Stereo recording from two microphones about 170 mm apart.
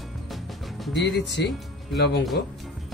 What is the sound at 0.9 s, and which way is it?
Speech, 90° left.